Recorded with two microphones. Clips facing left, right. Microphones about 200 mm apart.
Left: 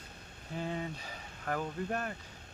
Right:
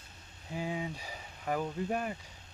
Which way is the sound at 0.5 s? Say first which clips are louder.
Right 1 dB; 10° right (ahead or behind).